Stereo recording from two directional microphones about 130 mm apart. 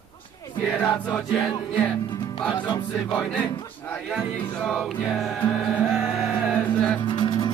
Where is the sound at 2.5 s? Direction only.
35° left (ahead or behind).